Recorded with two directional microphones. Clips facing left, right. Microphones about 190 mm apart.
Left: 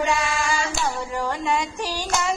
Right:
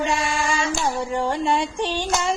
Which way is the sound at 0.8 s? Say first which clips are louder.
Right 3 dB; 30° right (ahead or behind).